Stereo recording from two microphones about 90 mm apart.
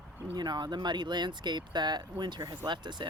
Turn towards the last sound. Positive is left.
turn(degrees=-60)  # may be behind; listen again after turning